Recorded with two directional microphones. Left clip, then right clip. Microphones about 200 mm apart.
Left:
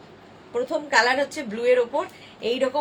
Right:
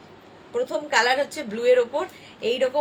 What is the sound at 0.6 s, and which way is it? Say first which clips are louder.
A woman's voice: left 1 dB; 20° right (ahead or behind).